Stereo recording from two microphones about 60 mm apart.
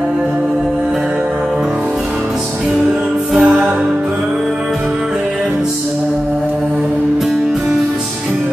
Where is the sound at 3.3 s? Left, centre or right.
Centre.